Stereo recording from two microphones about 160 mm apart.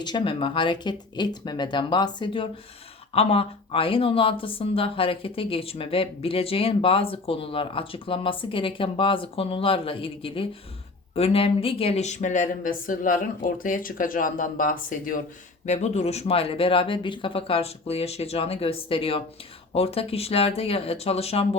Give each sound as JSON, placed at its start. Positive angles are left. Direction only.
{"t": 0.0, "sound": "speech", "side_deg": 30}
{"t": 15.6, "sound": "speech", "side_deg": 45}